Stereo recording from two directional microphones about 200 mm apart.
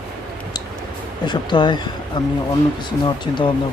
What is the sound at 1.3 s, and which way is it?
Speech, 25° left (ahead or behind).